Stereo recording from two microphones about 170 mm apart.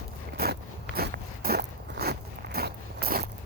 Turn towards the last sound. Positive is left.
turn(degrees=-65)  # may be behind; listen again after turning